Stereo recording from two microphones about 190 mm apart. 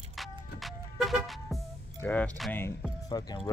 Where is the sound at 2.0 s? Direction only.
10° left (ahead or behind).